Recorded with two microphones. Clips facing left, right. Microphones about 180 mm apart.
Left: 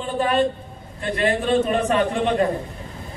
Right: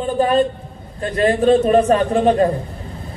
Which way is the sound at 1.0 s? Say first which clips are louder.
Right 6 dB; 40° right (ahead or behind).